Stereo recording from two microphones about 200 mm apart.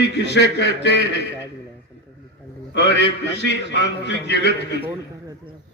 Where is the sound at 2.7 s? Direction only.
60° left (ahead or behind).